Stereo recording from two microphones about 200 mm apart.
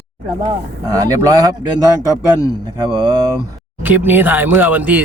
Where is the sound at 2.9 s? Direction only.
25° right (ahead or behind).